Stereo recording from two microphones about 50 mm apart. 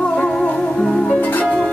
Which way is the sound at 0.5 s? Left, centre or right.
Centre.